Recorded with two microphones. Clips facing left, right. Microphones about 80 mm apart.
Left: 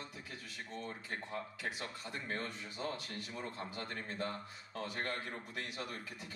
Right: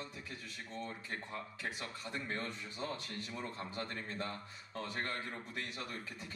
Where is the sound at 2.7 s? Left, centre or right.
Right.